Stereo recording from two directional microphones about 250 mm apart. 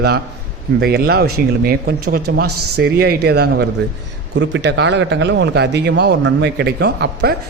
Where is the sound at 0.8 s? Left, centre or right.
Right.